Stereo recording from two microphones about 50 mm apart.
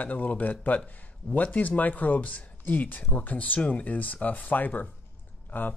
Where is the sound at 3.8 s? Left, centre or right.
Left.